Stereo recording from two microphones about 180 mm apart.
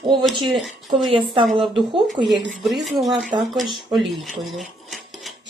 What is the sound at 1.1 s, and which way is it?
Speech, 30° right (ahead or behind).